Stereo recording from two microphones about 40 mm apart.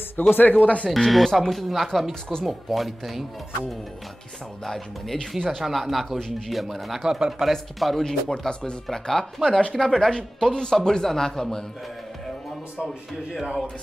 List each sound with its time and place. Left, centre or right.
0.3 s speech: left
0.8 s speech: centre
4.6 s speech: centre
6.1 s speech: centre
6.5 s speech: centre
7.1 s speech: centre
7.8 s speech: centre; by 9.8 s left
9.8 s speech: centre
10.1 s speech: centre
12.8 s speech: centre